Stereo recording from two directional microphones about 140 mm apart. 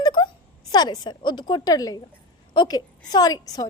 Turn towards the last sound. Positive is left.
turn(degrees=25)  # may be behind; listen again after turning